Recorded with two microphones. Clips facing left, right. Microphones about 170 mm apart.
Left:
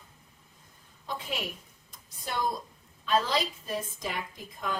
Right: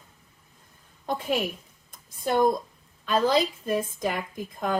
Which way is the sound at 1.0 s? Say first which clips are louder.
Right 9 dB; 50° right (ahead or behind).